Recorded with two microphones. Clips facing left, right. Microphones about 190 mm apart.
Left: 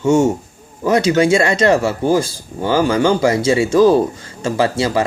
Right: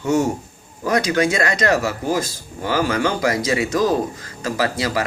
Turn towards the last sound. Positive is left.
turn(degrees=25)  # may be behind; listen again after turning